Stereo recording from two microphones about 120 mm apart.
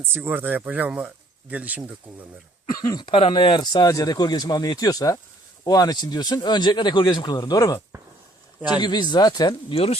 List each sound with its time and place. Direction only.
0.0 s speech: 15° right (ahead or behind)
2.7 s speech: 30° left (ahead or behind)
8.8 s speech: 35° left (ahead or behind); by 10.0 s 50° left (ahead or behind)